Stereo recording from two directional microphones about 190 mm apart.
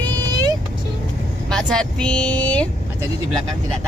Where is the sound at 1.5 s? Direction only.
5° left (ahead or behind).